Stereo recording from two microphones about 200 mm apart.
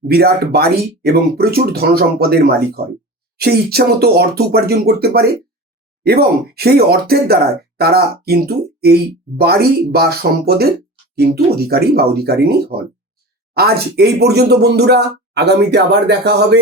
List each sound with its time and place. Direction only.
0.1 s speech: 50° right (ahead or behind)